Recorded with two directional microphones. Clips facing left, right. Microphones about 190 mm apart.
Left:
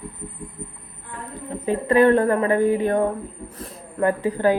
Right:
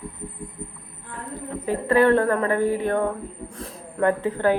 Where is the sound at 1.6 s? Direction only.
15° left (ahead or behind).